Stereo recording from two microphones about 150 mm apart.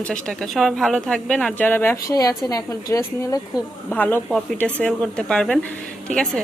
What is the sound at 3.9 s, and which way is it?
A woman's voice, 10° left (ahead or behind).